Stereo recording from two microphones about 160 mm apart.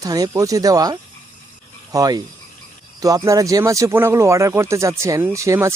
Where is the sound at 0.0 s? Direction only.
20° right (ahead or behind).